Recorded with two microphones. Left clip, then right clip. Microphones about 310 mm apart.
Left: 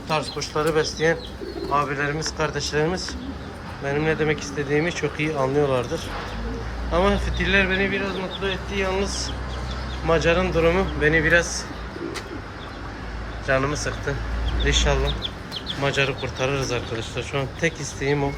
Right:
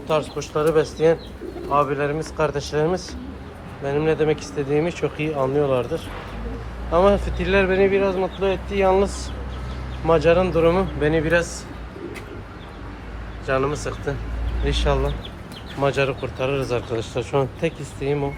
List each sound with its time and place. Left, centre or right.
0.1 s speech: centre
9.0 s speech: right
10.2 s speech: centre
13.5 s speech: centre
14.8 s speech: centre